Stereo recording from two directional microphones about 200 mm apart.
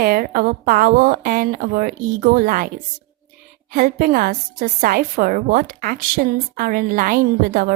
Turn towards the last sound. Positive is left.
turn(degrees=-45)  # may be behind; listen again after turning